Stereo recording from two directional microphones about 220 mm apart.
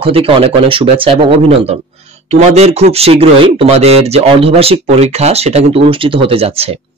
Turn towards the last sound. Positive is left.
turn(degrees=-25)  # may be behind; listen again after turning